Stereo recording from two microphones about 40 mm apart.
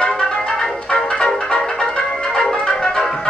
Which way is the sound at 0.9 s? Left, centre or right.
Centre.